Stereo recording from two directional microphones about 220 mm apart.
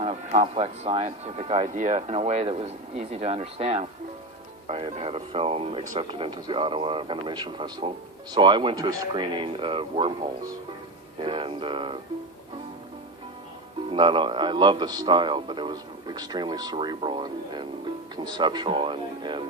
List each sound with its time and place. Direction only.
0.0 s speech: 30° right (ahead or behind)
13.9 s speech: 20° right (ahead or behind)